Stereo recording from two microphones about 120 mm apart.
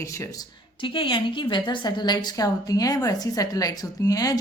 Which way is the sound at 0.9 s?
45° left (ahead or behind).